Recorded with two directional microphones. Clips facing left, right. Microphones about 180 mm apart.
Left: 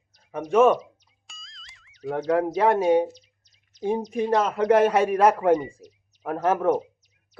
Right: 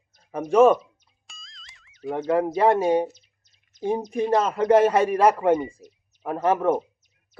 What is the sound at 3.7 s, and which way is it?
Bird, 50° right (ahead or behind).